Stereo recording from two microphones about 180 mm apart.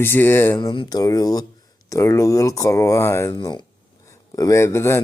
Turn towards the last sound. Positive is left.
turn(degrees=15)  # may be behind; listen again after turning